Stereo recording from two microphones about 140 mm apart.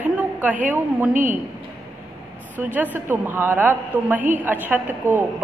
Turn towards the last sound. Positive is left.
turn(degrees=-15)  # may be behind; listen again after turning